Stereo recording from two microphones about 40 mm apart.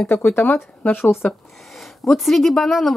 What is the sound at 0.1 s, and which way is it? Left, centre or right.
Speech, left.